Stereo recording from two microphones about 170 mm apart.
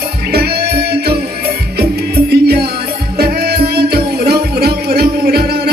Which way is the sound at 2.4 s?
70° right (ahead or behind).